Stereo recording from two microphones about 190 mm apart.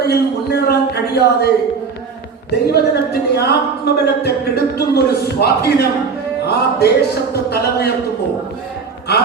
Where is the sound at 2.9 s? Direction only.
55° left (ahead or behind).